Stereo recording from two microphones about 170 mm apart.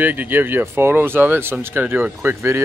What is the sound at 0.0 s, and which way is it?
Speech, 10° right (ahead or behind).